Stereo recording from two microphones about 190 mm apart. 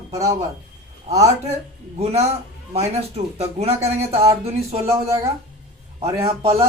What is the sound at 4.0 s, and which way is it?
Speech, 15° right (ahead or behind).